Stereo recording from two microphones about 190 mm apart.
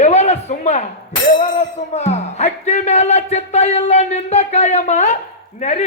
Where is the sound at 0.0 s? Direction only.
35° left (ahead or behind).